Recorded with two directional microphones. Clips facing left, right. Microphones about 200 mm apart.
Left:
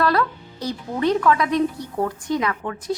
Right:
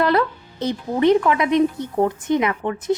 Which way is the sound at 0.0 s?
20° right (ahead or behind).